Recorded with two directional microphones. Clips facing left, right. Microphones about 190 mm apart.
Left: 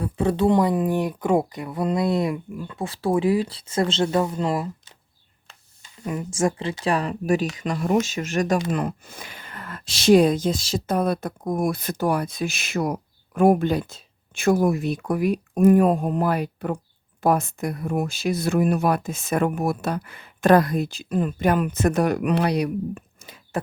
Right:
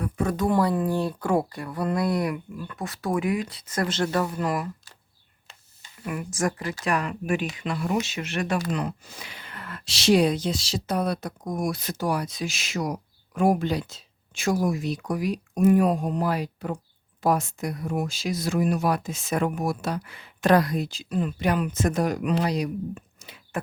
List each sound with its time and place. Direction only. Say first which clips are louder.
0.0 s speech: left 4 dB; 30° left (ahead or behind)
6.1 s speech: left 4 dB; 25° left (ahead or behind); by 23.3 s 65° left (ahead or behind)